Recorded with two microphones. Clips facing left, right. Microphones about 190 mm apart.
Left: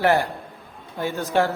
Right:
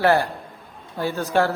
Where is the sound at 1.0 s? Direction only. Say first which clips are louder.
Right 1 dB; 15° left (ahead or behind).